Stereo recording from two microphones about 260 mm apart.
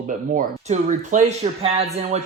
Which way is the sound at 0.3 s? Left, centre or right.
Right.